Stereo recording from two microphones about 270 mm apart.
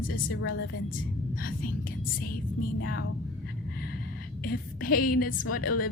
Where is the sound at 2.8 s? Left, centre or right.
Left.